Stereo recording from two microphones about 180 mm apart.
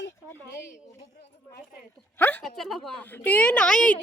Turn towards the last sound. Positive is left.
turn(degrees=5)  # may be behind; listen again after turning